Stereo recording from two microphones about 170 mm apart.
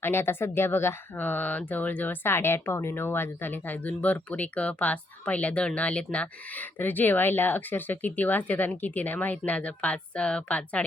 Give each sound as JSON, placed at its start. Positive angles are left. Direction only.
{"t": 0.0, "sound": "speech", "side_deg": 15}